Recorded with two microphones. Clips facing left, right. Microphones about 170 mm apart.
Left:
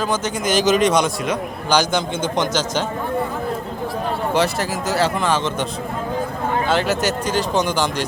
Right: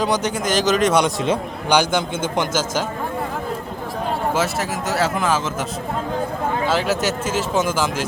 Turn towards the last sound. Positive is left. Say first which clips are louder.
# even
turn(degrees=0)  # may be behind; listen again after turning